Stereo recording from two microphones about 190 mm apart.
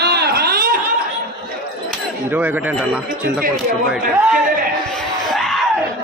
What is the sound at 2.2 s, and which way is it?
A man's voice, 10° right (ahead or behind).